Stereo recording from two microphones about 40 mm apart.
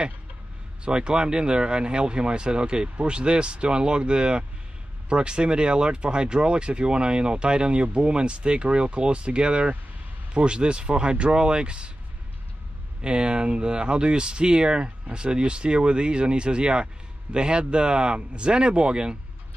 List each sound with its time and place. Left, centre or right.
0.8 s speech: right
13.0 s speech: right